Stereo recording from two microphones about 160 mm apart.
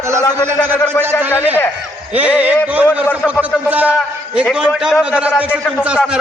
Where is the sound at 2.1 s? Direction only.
10° right (ahead or behind).